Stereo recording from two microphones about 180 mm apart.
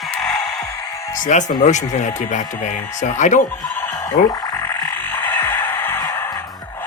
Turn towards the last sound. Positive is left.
turn(degrees=15)  # may be behind; listen again after turning